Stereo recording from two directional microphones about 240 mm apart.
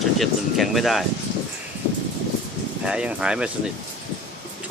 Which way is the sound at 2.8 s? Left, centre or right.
Centre.